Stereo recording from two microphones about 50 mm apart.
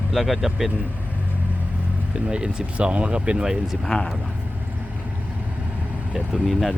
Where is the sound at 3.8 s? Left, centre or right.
Centre.